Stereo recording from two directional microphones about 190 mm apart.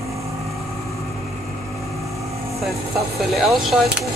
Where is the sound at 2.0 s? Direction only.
15° right (ahead or behind).